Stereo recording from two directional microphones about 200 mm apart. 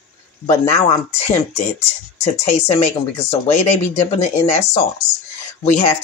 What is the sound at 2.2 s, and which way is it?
Speech, 30° left (ahead or behind).